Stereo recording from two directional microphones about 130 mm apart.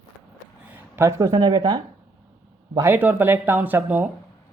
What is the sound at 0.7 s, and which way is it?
Speech, 20° right (ahead or behind).